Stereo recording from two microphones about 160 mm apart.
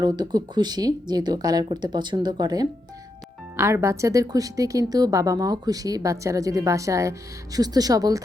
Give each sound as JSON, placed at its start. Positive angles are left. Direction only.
{"t": 0.0, "sound": "a woman's voice", "side_deg": -25}